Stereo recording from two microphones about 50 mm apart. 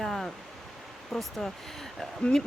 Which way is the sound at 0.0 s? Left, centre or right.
Centre.